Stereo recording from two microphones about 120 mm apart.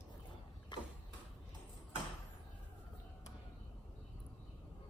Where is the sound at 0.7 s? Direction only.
35° left (ahead or behind).